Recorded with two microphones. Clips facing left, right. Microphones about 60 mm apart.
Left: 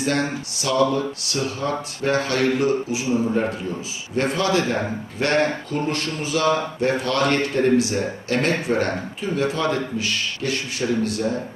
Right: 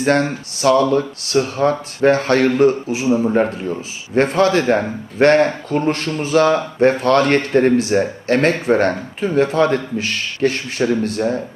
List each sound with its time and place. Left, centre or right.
0.0 s speech: right